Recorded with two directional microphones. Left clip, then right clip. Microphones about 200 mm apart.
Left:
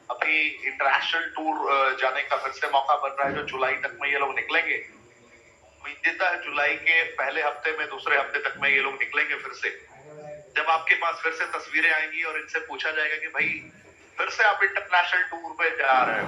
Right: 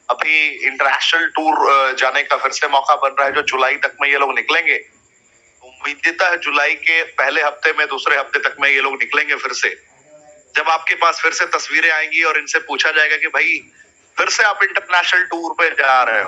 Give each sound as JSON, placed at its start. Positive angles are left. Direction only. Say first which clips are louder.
{"t": 0.1, "sound": "speech", "louder": "right 9 dB", "side_deg": -50}
{"t": 5.8, "sound": "speech", "louder": "right 9 dB", "side_deg": -50}